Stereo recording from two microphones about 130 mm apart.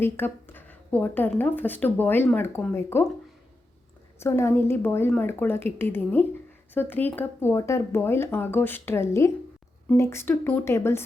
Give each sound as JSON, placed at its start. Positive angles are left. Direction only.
{"t": 0.0, "sound": "speech", "side_deg": 15}
{"t": 4.2, "sound": "speech", "side_deg": 20}